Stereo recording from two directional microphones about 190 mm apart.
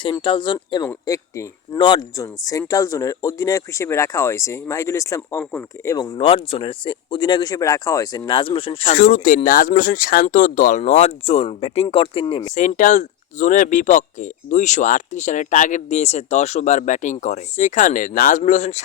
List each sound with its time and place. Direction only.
0.0 s speech: 25° left (ahead or behind)
6.1 s speech: 30° left (ahead or behind)
8.9 s speech: 45° left (ahead or behind); by 12.5 s 20° left (ahead or behind)
12.5 s speech: 40° left (ahead or behind)